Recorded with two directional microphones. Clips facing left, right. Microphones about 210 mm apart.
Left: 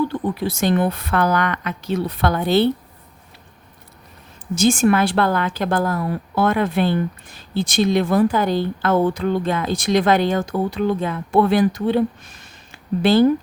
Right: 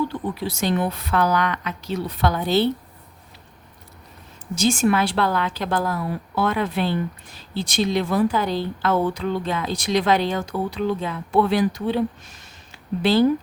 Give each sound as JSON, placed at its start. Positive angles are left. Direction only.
{"t": 0.1, "sound": "a woman's voice", "side_deg": 50}
{"t": 4.5, "sound": "a woman's voice", "side_deg": 50}